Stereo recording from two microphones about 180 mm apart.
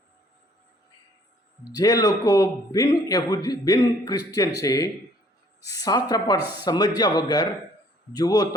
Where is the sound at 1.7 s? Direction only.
20° left (ahead or behind).